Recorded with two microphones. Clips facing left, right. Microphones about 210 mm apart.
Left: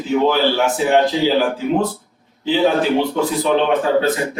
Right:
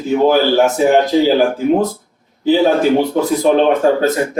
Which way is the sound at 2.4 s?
45° right (ahead or behind).